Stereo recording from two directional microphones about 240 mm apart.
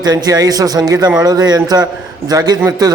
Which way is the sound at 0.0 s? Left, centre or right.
Centre.